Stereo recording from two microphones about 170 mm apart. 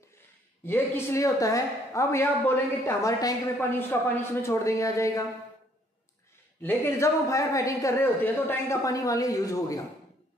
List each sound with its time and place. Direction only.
0.7 s a woman's voice: 15° left (ahead or behind)
6.6 s a man's voice: 15° left (ahead or behind)